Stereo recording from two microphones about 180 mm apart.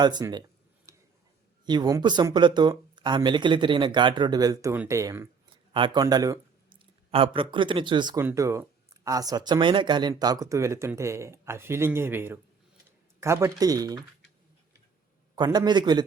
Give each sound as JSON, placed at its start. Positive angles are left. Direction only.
{"t": 0.0, "sound": "speech", "side_deg": -25}
{"t": 0.9, "sound": "tick-tock", "side_deg": -15}
{"t": 1.6, "sound": "speech", "side_deg": -25}
{"t": 5.7, "sound": "speech", "side_deg": -25}
{"t": 8.2, "sound": "speech", "side_deg": -15}
{"t": 15.4, "sound": "speech", "side_deg": -25}